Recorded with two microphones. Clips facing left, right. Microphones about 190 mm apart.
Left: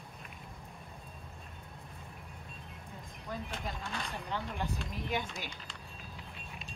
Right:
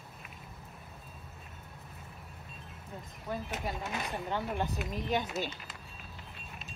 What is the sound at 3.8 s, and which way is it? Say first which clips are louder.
Speech: right 3 dB; 20° right (ahead or behind).